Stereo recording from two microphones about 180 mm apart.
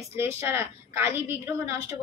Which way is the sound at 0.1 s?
15° right (ahead or behind).